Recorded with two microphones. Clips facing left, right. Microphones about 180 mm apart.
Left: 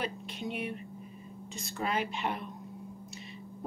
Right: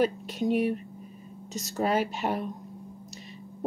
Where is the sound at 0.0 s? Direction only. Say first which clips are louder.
Right 10 dB; 40° right (ahead or behind).